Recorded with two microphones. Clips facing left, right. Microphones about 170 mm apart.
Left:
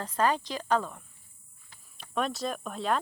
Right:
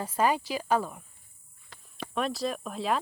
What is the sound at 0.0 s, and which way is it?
Speech, 10° right (ahead or behind).